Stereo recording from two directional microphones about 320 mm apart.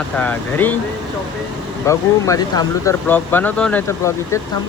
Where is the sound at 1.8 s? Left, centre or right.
Centre.